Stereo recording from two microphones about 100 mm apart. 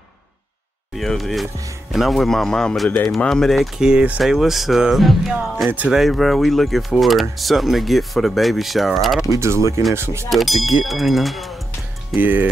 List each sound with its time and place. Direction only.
0.9 s speech: centre (ahead or behind)
9.3 s speech: 30° right (ahead or behind)
10.3 s speech: centre (ahead or behind)
12.2 s speech: 20° right (ahead or behind)